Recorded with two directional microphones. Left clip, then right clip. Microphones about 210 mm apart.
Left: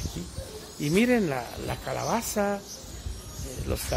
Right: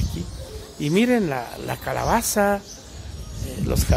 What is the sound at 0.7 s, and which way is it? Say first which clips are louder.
Speech: right 4 dB; 15° right (ahead or behind).